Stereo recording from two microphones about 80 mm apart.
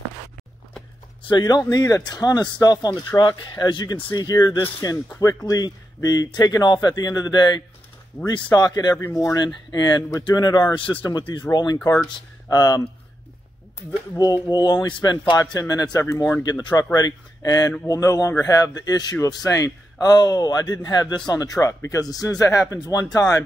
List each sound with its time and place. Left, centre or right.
1.2 s speech: left
1.7 s speech: left
9.1 s speech: left
9.7 s speech: left
11.1 s speech: left
14.1 s speech: left
15.6 s speech: left
22.8 s speech: left